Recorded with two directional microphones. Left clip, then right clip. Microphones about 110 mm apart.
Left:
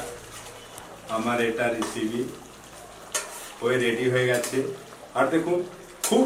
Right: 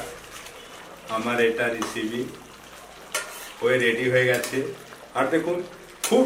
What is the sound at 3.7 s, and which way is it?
Speech, 5° right (ahead or behind).